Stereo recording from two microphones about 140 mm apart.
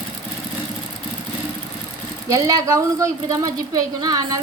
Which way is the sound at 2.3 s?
25° right (ahead or behind).